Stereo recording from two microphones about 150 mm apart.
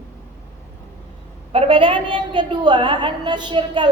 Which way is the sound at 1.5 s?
35° right (ahead or behind).